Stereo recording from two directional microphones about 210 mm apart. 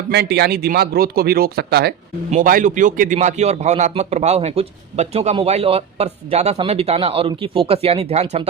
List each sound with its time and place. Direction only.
0.1 s a man's voice: 50° right (ahead or behind); by 8.4 s 30° right (ahead or behind)